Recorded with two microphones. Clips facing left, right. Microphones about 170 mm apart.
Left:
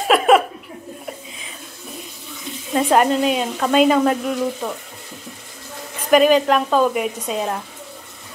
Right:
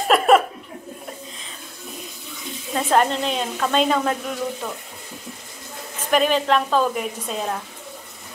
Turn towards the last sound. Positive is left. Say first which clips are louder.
# left 4 dB
turn(degrees=5)  # may be behind; listen again after turning